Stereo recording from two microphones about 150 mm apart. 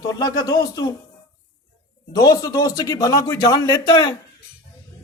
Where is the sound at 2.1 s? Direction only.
25° left (ahead or behind).